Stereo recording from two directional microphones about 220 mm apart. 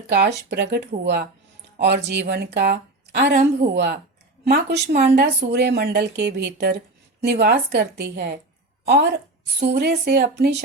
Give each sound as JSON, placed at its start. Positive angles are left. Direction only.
{"t": 0.1, "sound": "speech", "side_deg": -50}
{"t": 9.6, "sound": "speech", "side_deg": -50}